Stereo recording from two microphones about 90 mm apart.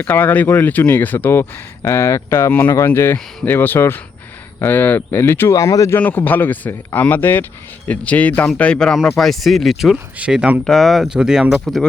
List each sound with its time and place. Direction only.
0.0 s speech: 20° left (ahead or behind)
6.0 s speech: 20° left (ahead or behind); by 10.6 s 10° right (ahead or behind)
10.7 s speech: 5° left (ahead or behind)